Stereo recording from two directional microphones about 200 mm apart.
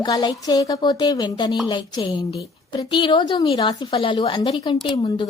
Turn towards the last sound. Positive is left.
turn(degrees=25)  # may be behind; listen again after turning